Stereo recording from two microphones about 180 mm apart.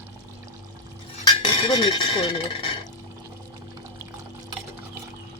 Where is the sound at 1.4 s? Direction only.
30° left (ahead or behind).